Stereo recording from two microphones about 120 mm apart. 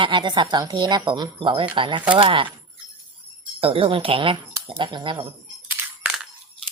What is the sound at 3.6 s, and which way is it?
A woman's voice, 50° right (ahead or behind).